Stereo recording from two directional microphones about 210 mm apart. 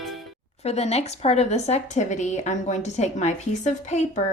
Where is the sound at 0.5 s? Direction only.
30° left (ahead or behind).